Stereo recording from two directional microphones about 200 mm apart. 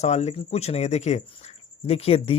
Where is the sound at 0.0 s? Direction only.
35° left (ahead or behind).